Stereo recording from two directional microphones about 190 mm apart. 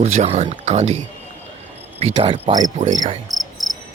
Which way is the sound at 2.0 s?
30° right (ahead or behind).